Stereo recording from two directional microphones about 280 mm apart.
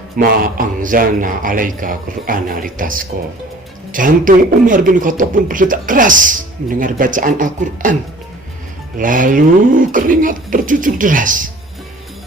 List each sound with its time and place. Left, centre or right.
0.2 s a man's voice: right
9.0 s a man's voice: right